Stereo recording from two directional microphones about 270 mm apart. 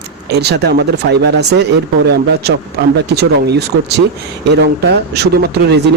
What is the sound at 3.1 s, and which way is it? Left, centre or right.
Speech, right.